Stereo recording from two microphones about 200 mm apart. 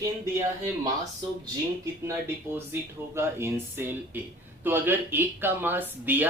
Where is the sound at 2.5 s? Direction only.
10° right (ahead or behind).